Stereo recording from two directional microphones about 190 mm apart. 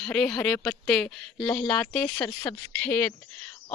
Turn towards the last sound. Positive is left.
turn(degrees=5)  # may be behind; listen again after turning